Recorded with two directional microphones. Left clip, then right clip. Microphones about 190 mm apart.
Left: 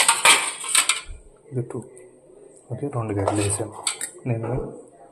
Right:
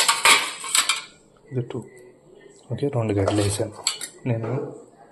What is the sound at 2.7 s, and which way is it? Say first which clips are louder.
Speech: right 4 dB; 20° right (ahead or behind).